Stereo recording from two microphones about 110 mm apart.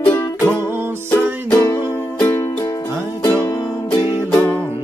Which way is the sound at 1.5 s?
25° left (ahead or behind).